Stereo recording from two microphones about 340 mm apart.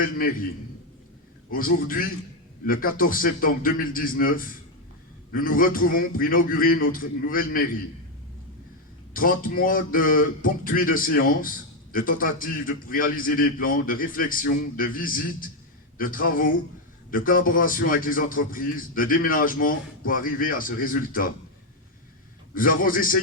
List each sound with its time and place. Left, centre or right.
1.5 s a man's voice: left
9.1 s a man's voice: left
22.5 s a man's voice: left